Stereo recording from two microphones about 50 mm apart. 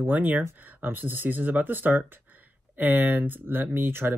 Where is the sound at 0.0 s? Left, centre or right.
Right.